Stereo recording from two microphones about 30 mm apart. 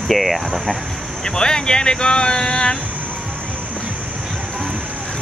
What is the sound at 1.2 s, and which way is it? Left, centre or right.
Speech, left.